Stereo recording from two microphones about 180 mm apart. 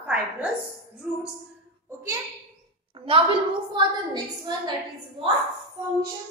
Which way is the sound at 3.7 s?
25° right (ahead or behind).